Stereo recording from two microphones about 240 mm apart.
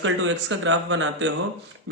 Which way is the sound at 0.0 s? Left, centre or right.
Right.